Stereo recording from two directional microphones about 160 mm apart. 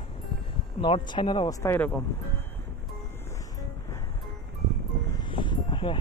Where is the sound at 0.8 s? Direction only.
30° left (ahead or behind).